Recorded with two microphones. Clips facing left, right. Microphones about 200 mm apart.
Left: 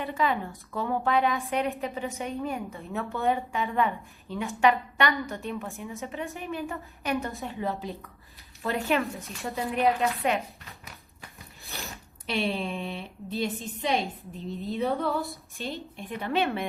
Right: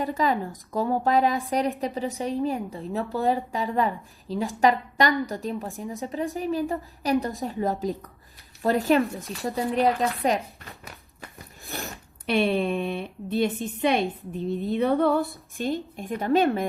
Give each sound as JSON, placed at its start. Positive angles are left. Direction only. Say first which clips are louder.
{"t": 0.0, "sound": "speech", "louder": "right 3 dB", "side_deg": -40}
{"t": 11.7, "sound": "a sound", "louder": "right 5 dB", "side_deg": -50}
{"t": 12.2, "sound": "a woman's voice", "louder": "right 6 dB", "side_deg": -55}
{"t": 15.2, "sound": "a woman's voice", "louder": "right 6 dB", "side_deg": 0}
{"t": 16.0, "sound": "speech", "louder": "right 5 dB", "side_deg": -45}